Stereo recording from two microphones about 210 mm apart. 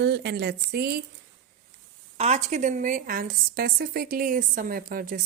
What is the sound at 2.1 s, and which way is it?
A woman's voice, 30° right (ahead or behind).